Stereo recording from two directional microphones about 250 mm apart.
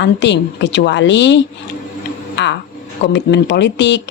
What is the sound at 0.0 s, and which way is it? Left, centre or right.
Speech, left.